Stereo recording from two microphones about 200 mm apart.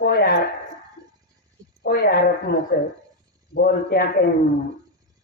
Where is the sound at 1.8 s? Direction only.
50° left (ahead or behind).